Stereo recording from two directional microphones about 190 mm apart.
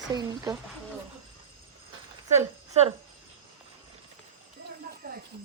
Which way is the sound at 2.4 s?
35° right (ahead or behind).